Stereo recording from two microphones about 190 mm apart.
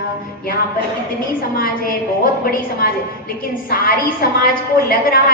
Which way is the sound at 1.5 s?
50° left (ahead or behind).